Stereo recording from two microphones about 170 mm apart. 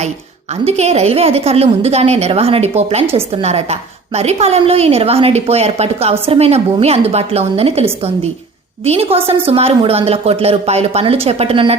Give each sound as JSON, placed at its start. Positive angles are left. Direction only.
{"t": 0.6, "sound": "a woman's voice", "side_deg": -40}